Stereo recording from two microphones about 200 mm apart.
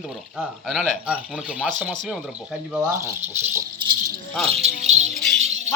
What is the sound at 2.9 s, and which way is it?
Speech, 15° right (ahead or behind).